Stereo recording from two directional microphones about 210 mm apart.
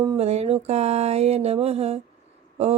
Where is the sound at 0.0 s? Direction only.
20° right (ahead or behind).